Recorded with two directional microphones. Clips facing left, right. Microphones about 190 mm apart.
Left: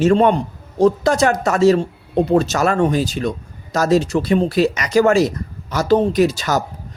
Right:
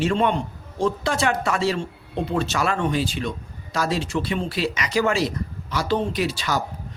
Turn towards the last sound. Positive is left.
turn(degrees=45)  # may be behind; listen again after turning